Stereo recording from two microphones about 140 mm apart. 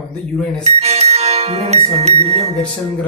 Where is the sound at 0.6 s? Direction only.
50° right (ahead or behind).